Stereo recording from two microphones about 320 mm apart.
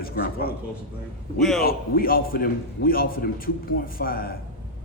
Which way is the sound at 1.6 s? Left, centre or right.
Left.